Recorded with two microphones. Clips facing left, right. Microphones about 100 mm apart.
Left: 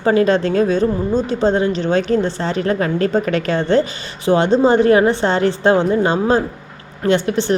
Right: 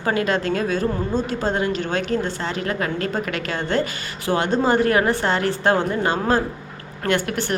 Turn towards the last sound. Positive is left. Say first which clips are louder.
# left 6 dB
turn(degrees=20)  # may be behind; listen again after turning